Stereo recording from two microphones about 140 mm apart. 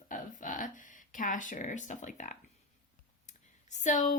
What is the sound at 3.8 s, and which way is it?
Speech, 65° left (ahead or behind).